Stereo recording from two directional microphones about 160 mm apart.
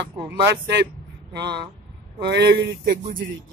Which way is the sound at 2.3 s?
90° right.